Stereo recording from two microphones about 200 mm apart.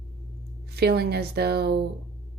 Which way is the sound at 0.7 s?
50° right (ahead or behind).